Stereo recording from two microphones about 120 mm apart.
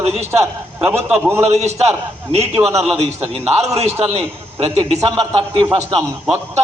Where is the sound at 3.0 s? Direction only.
60° right (ahead or behind).